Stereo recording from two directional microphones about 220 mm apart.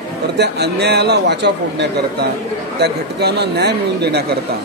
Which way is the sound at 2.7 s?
50° right (ahead or behind).